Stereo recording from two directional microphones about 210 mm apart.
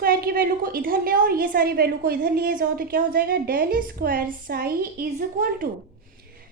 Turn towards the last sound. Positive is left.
turn(degrees=-40)  # may be behind; listen again after turning